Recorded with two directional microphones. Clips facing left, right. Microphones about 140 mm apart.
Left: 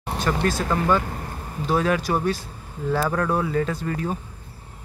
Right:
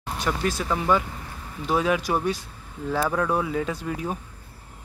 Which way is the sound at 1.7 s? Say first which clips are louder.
Left 1 dB; 5° right (ahead or behind).